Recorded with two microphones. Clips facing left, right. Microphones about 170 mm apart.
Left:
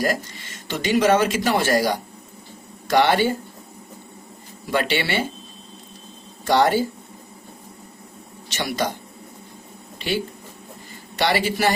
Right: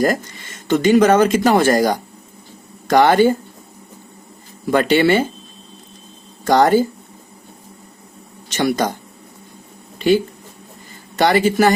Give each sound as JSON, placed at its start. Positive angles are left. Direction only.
{"t": 0.7, "sound": "speech", "side_deg": -45}
{"t": 4.6, "sound": "speech", "side_deg": -45}
{"t": 6.4, "sound": "speech", "side_deg": -45}
{"t": 8.4, "sound": "speech", "side_deg": -45}
{"t": 10.0, "sound": "speech", "side_deg": -45}